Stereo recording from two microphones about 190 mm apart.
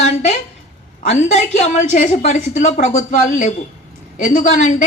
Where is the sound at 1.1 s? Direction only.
35° left (ahead or behind).